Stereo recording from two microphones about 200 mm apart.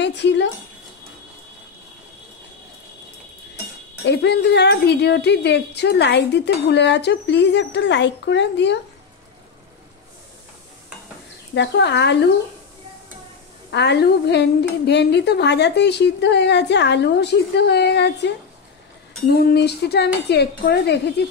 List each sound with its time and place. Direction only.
0.0 s a woman's voice: 60° left (ahead or behind)
4.0 s a woman's voice: 55° left (ahead or behind)
11.5 s a woman's voice: 60° left (ahead or behind)
13.7 s a woman's voice: 60° left (ahead or behind)
19.3 s a woman's voice: 55° left (ahead or behind)